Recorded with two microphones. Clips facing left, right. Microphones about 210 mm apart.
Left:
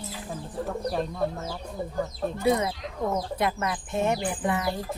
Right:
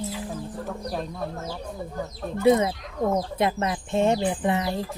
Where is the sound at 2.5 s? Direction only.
25° right (ahead or behind).